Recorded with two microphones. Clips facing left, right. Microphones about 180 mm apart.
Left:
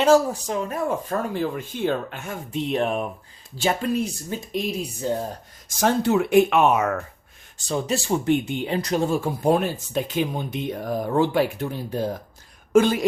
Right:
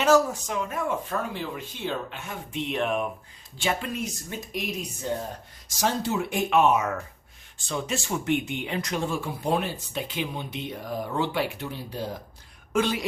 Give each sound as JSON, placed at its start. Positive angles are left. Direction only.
{"t": 0.0, "sound": "speech", "side_deg": 30}
{"t": 5.6, "sound": "speech", "side_deg": 55}
{"t": 7.7, "sound": "speech", "side_deg": 35}